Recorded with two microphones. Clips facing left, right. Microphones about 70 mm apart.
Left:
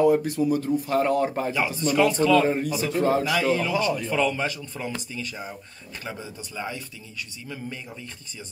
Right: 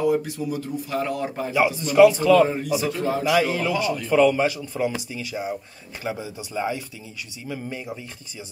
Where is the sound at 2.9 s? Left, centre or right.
Left.